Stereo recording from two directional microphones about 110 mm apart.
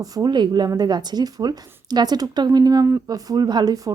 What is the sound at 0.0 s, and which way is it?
Speech, 35° right (ahead or behind).